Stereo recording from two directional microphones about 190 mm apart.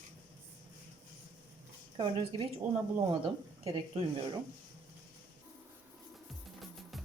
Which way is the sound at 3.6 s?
30° right (ahead or behind).